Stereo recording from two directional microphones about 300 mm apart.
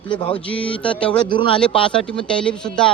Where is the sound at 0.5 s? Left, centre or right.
Centre.